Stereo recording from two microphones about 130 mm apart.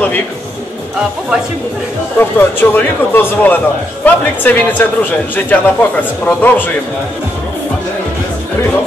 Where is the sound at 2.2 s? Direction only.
15° left (ahead or behind).